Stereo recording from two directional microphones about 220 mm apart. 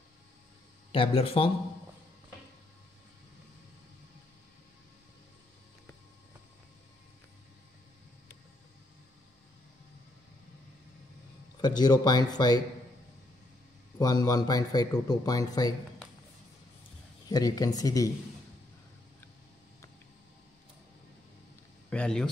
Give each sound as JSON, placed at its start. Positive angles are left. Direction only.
{"t": 0.9, "sound": "speech", "side_deg": 25}
{"t": 11.6, "sound": "speech", "side_deg": 20}
{"t": 13.9, "sound": "speech", "side_deg": 15}
{"t": 17.3, "sound": "speech", "side_deg": 15}
{"t": 21.8, "sound": "speech", "side_deg": 5}